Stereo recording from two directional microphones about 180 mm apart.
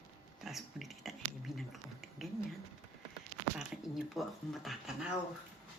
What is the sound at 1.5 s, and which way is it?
Finger snapping, centre (ahead or behind).